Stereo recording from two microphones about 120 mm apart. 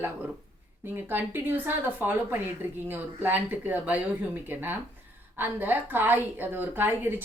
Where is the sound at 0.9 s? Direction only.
15° right (ahead or behind).